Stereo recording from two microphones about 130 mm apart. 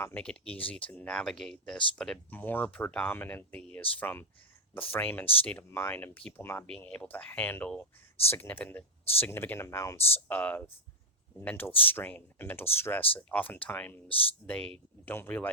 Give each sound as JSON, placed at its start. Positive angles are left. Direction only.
{"t": 0.0, "sound": "speech", "side_deg": 10}